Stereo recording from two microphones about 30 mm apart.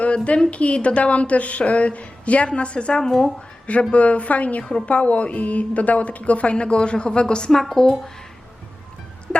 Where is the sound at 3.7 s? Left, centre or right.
Left.